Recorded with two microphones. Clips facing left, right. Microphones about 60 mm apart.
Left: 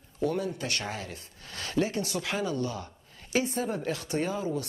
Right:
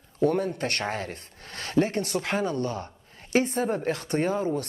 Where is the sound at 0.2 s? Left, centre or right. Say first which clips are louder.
Right 5 dB; right.